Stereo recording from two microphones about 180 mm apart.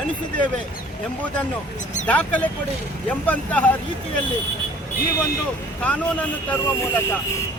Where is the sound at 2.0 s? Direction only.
10° left (ahead or behind).